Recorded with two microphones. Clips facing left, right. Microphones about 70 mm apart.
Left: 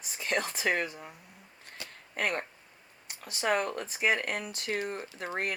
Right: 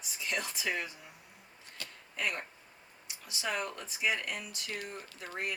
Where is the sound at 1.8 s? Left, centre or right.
Left.